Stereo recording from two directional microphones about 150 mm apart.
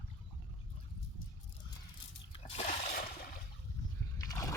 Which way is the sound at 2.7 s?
80° left.